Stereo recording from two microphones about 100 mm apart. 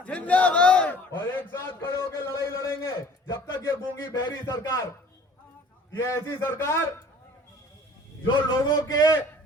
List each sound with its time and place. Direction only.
0.0 s a sound: 15° left (ahead or behind)
4.0 s speech: 40° left (ahead or behind)
5.9 s a man's voice: 25° left (ahead or behind)
8.6 s speech: 40° left (ahead or behind)